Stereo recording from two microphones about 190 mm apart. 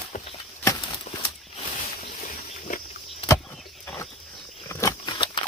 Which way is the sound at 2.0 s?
45° left (ahead or behind).